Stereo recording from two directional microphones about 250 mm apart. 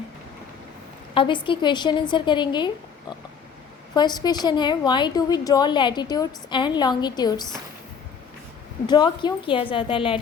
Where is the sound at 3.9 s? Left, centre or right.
Centre.